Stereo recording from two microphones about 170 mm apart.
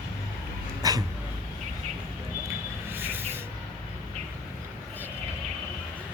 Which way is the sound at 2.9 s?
10° right (ahead or behind).